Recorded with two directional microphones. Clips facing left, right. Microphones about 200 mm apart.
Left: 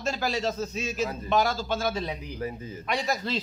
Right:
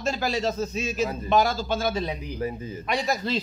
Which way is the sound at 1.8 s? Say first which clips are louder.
Right 3 dB; 20° right (ahead or behind).